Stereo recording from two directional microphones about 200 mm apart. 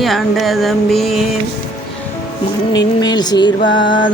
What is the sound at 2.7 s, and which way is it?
Speech, 20° left (ahead or behind).